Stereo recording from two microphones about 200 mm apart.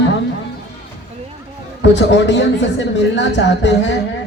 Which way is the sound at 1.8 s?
65° left (ahead or behind).